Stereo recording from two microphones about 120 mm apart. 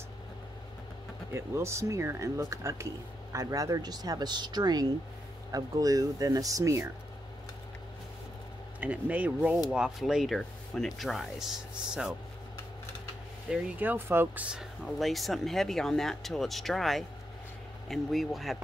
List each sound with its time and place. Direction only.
1.3 s speech: 20° right (ahead or behind)
8.7 s speech: 10° right (ahead or behind)
13.5 s speech: 15° right (ahead or behind)